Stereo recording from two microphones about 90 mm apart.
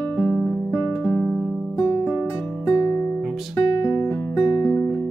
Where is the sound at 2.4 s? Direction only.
20° left (ahead or behind).